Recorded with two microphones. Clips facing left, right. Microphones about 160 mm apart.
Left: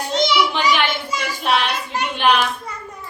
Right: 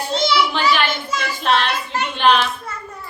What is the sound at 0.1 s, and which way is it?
Child singing, 15° left (ahead or behind).